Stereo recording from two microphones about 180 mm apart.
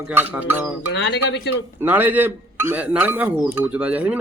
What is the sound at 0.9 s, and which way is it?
Speech, 75° left (ahead or behind).